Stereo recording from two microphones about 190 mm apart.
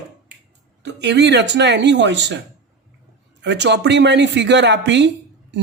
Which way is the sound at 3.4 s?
65° right (ahead or behind).